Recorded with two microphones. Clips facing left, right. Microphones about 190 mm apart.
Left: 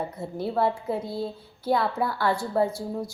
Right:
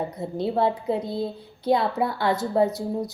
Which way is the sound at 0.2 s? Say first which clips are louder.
Right 2 dB; 20° right (ahead or behind).